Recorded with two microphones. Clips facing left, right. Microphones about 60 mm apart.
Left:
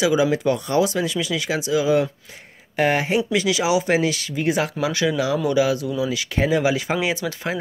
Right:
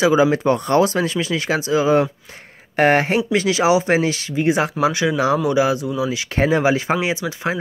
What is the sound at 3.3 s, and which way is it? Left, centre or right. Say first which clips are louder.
Speech: right 6 dB; right.